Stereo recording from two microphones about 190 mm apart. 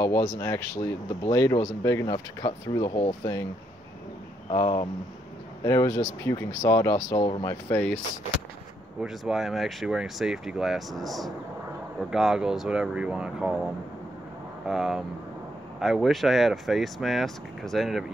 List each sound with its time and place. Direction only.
0.0 s speech: 15° left (ahead or behind)
4.5 s speech: 25° left (ahead or behind)
7.7 s speech: 10° left (ahead or behind)
9.0 s speech: centre (ahead or behind)
14.7 s speech: centre (ahead or behind)